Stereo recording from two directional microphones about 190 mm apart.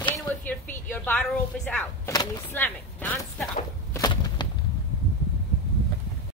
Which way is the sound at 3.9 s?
20° left (ahead or behind).